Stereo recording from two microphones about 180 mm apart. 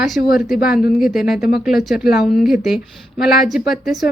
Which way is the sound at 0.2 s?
55° left (ahead or behind).